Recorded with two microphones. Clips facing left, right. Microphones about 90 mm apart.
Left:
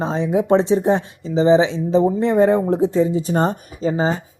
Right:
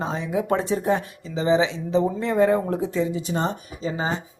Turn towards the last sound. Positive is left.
turn(degrees=35)  # may be behind; listen again after turning